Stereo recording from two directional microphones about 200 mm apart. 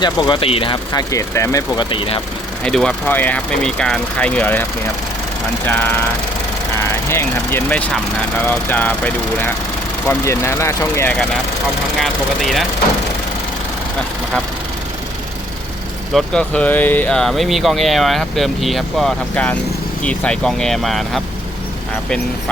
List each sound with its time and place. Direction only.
0.0 s speech: 20° left (ahead or behind)
2.6 s speech: 5° left (ahead or behind)
5.6 s speech: 10° left (ahead or behind)
7.1 s speech: 10° left (ahead or behind)
10.1 s speech: 15° left (ahead or behind)
16.1 s speech: 5° left (ahead or behind)